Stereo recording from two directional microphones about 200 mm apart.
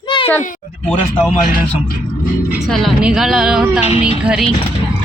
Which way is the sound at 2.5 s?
Centre (ahead or behind).